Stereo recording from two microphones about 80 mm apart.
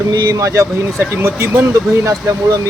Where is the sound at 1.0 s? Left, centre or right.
Right.